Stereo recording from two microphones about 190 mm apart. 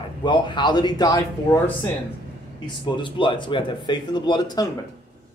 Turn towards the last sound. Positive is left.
turn(degrees=20)  # may be behind; listen again after turning